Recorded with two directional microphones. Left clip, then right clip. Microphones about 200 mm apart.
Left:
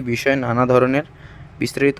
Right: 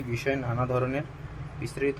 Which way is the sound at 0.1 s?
50° left (ahead or behind).